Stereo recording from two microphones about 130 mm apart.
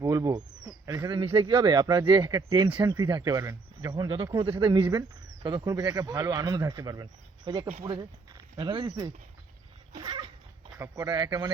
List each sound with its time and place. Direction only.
0.0 s speech: 25° right (ahead or behind)
0.9 s a sound: 30° right (ahead or behind)
1.2 s speech: 45° right (ahead or behind); by 11.5 s 25° right (ahead or behind)